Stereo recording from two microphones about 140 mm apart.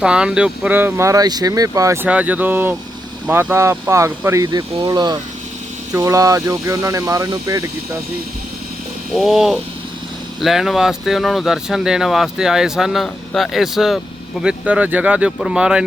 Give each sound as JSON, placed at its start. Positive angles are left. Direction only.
{"t": 0.0, "sound": "speech", "side_deg": -5}
{"t": 2.0, "sound": "speech", "side_deg": -10}
{"t": 9.1, "sound": "speech", "side_deg": 0}